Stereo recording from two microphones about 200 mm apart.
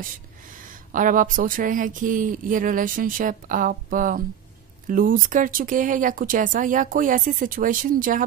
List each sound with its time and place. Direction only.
0.9 s speech: 40° right (ahead or behind)